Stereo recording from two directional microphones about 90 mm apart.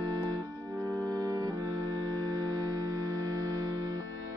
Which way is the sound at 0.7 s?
35° right (ahead or behind).